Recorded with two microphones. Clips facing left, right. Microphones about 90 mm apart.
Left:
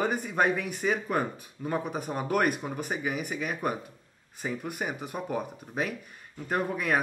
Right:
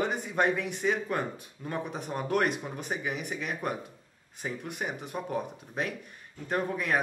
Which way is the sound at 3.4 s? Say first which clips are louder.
Left 2 dB; 5° left (ahead or behind).